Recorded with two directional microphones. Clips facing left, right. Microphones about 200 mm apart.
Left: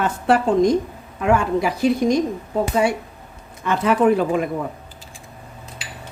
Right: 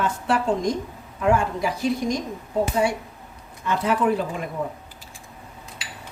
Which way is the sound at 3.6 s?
75° left (ahead or behind).